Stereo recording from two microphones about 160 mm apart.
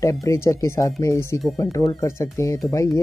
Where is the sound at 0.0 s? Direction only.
20° left (ahead or behind).